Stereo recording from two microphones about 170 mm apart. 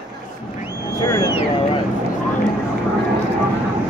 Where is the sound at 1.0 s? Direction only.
20° left (ahead or behind).